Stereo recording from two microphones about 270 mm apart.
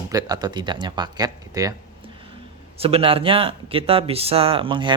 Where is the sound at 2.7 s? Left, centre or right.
Right.